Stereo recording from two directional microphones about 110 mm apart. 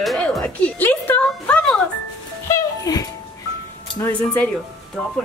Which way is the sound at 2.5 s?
35° left (ahead or behind).